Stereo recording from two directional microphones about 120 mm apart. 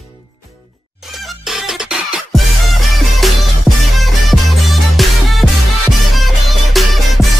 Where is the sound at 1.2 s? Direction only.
5° right (ahead or behind).